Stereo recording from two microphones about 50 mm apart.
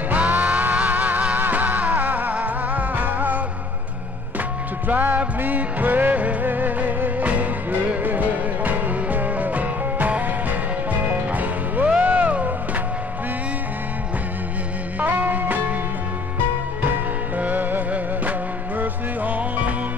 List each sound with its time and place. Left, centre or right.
0.1 s music: right
4.8 s music: right
15.0 s music: right
16.8 s music: right